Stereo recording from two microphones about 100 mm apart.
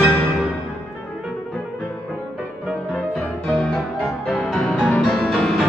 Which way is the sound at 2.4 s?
10° right (ahead or behind).